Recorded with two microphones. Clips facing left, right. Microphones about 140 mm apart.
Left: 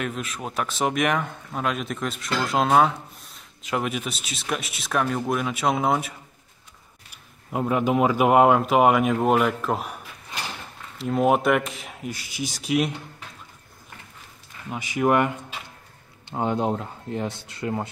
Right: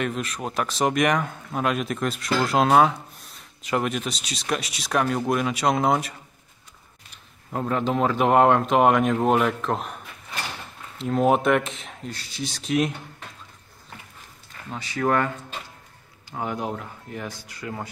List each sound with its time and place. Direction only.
0.0 s speech: centre (ahead or behind)
14.7 s speech: 15° left (ahead or behind)